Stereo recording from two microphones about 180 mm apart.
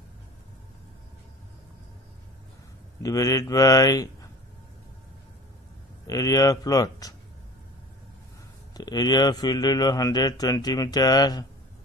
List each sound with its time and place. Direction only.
3.0 s a man's voice: 20° left (ahead or behind)
6.0 s a man's voice: 20° left (ahead or behind)
8.7 s a man's voice: 20° left (ahead or behind)